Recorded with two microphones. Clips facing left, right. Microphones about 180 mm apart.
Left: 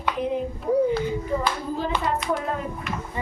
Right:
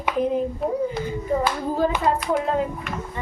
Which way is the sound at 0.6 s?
Centre (ahead or behind).